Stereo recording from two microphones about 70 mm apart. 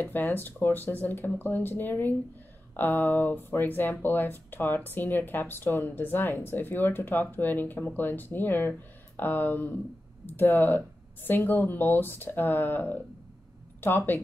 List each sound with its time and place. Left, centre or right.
0.0 s speech: left